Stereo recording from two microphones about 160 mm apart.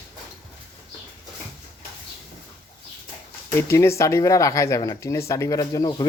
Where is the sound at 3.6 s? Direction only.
15° left (ahead or behind).